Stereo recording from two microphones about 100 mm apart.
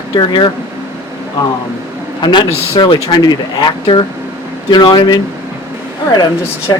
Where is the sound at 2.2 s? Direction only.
45° left (ahead or behind).